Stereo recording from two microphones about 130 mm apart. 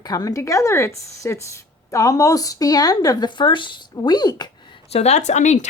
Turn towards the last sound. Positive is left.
turn(degrees=65)  # may be behind; listen again after turning